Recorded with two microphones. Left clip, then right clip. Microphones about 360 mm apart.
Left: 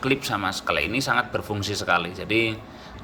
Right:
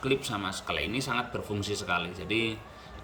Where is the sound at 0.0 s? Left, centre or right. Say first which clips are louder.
Left 6 dB; centre.